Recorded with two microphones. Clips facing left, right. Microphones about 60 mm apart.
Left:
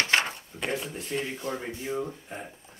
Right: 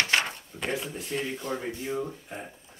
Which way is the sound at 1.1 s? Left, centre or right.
Centre.